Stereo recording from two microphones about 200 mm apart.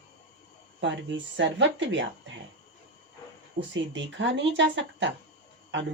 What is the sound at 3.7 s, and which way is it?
Speech, 65° right (ahead or behind).